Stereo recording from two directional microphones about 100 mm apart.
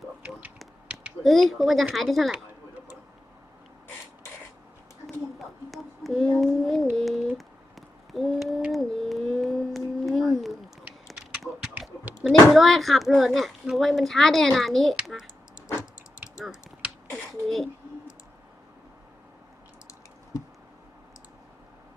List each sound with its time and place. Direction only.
0.3 s finger snapping: 15° right (ahead or behind)
1.2 s speech: centre (ahead or behind)
5.7 s a sound: centre (ahead or behind)
6.4 s speech: centre (ahead or behind)
6.9 s a sound: centre (ahead or behind)
12.3 s speech: centre (ahead or behind)
15.0 s typing: 5° right (ahead or behind)
17.1 s speech: 5° left (ahead or behind)